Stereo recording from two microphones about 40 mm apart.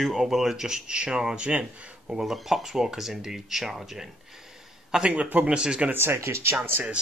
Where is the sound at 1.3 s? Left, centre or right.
Right.